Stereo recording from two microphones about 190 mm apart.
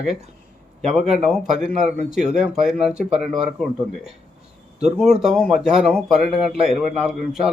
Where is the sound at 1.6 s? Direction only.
5° right (ahead or behind).